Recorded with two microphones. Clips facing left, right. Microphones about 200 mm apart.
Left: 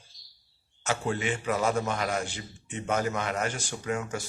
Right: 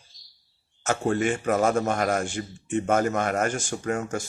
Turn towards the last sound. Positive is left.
turn(degrees=-45)  # may be behind; listen again after turning